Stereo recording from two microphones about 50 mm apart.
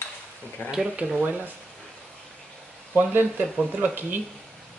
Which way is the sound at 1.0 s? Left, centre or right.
Right.